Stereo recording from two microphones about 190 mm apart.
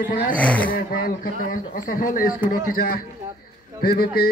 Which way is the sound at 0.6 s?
50° left (ahead or behind).